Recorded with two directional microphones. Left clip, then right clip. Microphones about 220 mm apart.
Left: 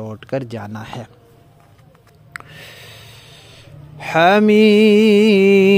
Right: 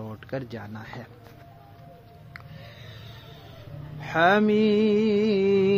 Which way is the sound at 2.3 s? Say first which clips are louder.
Left 12 dB; 40° left (ahead or behind).